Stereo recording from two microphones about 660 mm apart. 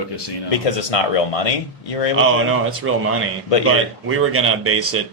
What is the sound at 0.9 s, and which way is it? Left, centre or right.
Speech, left.